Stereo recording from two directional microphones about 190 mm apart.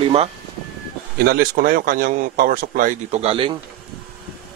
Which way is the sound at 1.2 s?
55° right (ahead or behind).